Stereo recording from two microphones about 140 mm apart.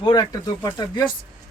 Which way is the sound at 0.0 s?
30° left (ahead or behind).